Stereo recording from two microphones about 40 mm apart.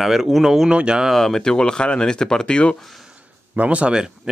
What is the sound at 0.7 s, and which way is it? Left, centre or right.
Speech, right.